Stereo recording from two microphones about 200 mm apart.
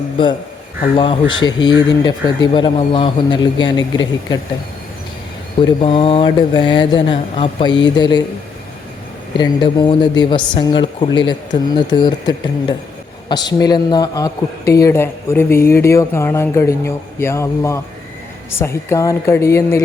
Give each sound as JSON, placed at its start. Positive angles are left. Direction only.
{"t": 0.9, "sound": "speech", "side_deg": 25}
{"t": 5.6, "sound": "speech", "side_deg": 25}
{"t": 9.4, "sound": "a man's voice", "side_deg": 20}